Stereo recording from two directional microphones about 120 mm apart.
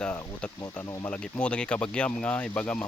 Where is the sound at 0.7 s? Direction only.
20° left (ahead or behind).